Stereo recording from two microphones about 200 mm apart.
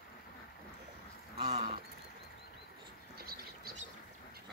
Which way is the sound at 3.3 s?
50° right (ahead or behind).